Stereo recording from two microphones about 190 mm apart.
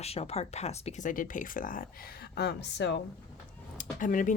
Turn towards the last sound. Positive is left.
turn(degrees=45)  # may be behind; listen again after turning